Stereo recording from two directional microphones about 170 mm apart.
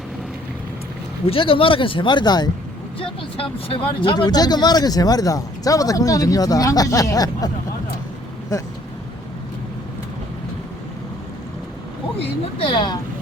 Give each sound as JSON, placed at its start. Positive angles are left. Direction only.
{"t": 1.3, "sound": "speech", "side_deg": 30}
{"t": 12.5, "sound": "speech", "side_deg": 30}